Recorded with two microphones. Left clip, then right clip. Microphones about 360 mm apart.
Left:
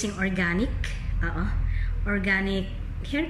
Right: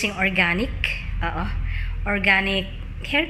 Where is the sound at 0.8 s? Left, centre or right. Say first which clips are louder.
Right 9 dB; centre.